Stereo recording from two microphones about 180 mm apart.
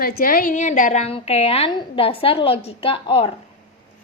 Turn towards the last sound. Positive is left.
turn(degrees=30)  # may be behind; listen again after turning